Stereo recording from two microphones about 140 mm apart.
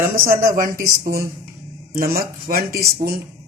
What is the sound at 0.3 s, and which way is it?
Speech, 80° right.